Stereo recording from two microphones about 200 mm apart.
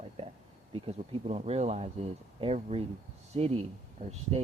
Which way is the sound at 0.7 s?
30° right (ahead or behind).